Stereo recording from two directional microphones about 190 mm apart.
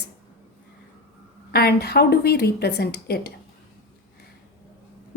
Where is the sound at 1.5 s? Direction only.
55° left (ahead or behind).